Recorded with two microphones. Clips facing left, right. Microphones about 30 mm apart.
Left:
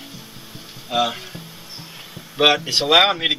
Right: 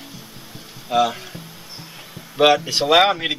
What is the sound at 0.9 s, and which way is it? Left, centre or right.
Speech, centre.